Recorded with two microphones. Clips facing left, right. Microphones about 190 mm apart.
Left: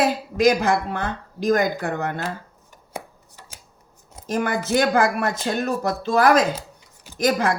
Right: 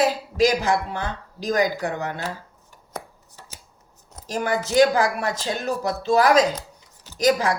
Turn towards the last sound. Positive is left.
turn(degrees=55)  # may be behind; listen again after turning